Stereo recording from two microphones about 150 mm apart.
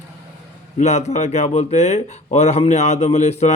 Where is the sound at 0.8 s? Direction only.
50° left (ahead or behind).